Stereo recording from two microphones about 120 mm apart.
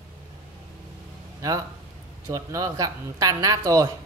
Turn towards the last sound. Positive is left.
turn(degrees=-30)  # may be behind; listen again after turning